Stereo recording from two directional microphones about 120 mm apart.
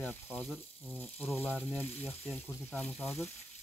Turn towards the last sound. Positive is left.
turn(degrees=10)  # may be behind; listen again after turning